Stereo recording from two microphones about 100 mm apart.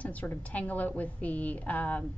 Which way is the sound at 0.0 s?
15° left (ahead or behind).